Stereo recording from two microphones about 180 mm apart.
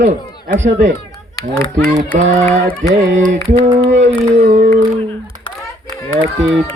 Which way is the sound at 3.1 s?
40° right (ahead or behind).